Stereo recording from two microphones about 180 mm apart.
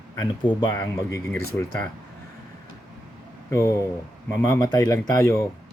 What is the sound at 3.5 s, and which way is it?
Speech, 15° left (ahead or behind).